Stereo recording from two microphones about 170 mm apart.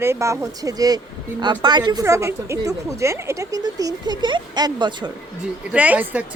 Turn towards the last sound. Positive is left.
turn(degrees=-10)  # may be behind; listen again after turning